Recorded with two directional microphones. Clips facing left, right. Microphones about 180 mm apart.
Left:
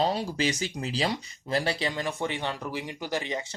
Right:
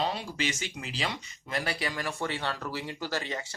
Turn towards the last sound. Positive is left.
turn(degrees=20)  # may be behind; listen again after turning